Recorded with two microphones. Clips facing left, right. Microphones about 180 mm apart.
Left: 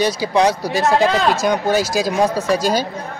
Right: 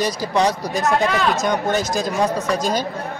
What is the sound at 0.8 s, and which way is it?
Speech, 30° left (ahead or behind).